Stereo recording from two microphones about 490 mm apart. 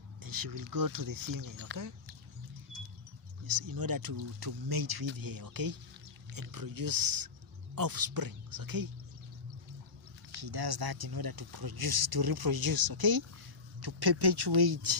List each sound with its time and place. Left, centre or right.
0.2 s speech: right
3.4 s speech: right
10.4 s speech: right